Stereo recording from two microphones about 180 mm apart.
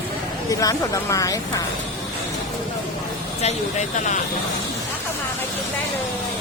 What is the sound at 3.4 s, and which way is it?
Speech, 40° left (ahead or behind).